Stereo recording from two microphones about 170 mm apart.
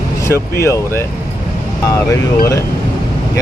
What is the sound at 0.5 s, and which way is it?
Speech, 15° left (ahead or behind).